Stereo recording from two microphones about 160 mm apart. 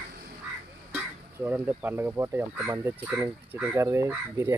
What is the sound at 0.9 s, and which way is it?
Speech, 10° right (ahead or behind).